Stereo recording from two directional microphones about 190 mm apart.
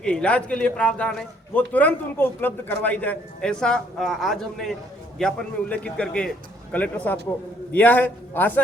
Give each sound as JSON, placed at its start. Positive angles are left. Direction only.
{"t": 0.0, "sound": "a man's voice", "side_deg": 5}